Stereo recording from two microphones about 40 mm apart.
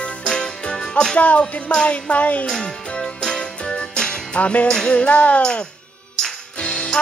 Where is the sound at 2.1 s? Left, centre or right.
Left.